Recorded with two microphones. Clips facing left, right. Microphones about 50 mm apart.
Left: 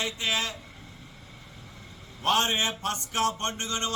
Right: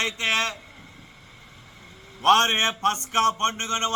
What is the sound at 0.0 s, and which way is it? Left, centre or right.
Speech, right.